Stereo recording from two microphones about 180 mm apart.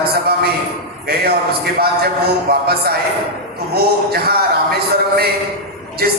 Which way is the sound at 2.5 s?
60° right (ahead or behind).